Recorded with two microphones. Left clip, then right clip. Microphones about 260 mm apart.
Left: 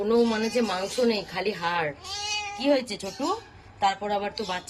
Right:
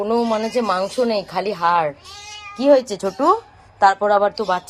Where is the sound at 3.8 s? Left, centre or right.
Right.